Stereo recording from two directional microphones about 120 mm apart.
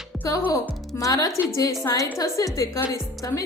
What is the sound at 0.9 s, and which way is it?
A woman's voice, 30° left (ahead or behind).